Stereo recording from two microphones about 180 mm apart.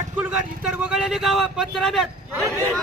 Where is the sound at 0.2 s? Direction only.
10° right (ahead or behind).